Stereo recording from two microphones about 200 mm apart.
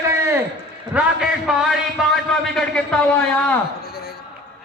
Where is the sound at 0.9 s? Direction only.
5° right (ahead or behind).